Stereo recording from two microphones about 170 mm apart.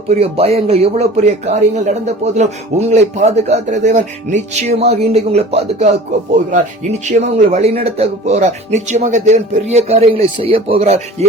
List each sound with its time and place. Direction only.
0.1 s speech: 35° right (ahead or behind)